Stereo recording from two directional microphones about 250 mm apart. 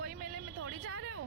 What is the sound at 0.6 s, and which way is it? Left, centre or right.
Speech, right.